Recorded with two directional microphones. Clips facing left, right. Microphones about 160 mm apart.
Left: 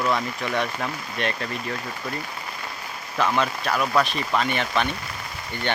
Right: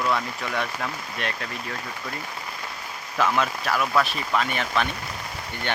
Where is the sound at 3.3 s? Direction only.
5° right (ahead or behind).